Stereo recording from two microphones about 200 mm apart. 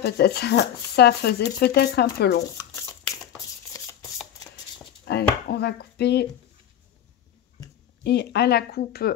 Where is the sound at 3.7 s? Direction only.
15° left (ahead or behind).